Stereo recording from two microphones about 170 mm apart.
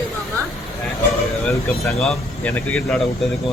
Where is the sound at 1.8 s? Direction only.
Centre (ahead or behind).